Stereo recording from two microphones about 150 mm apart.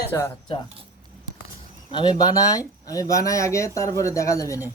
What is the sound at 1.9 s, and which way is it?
Speech, 30° left (ahead or behind).